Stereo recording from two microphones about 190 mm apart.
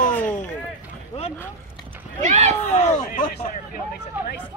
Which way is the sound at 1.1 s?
30° left (ahead or behind).